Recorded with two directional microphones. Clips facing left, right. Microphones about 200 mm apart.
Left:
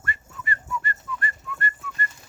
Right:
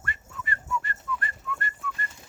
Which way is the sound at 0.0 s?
Centre (ahead or behind).